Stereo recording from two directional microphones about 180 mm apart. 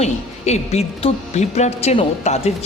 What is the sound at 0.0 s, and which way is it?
Speech, 35° left (ahead or behind).